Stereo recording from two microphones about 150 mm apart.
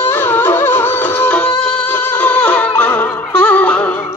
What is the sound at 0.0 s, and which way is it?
Music, 15° left (ahead or behind).